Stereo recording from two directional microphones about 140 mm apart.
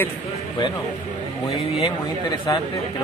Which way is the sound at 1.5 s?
45° left (ahead or behind).